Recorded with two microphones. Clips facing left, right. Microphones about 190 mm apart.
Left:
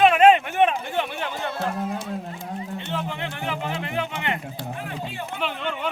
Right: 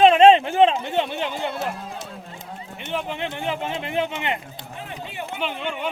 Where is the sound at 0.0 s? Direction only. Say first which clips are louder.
Right 3 dB; 25° right (ahead or behind).